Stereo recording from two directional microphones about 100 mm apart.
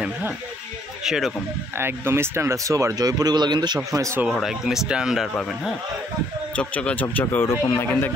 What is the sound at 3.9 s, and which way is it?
Speech, 30° right (ahead or behind).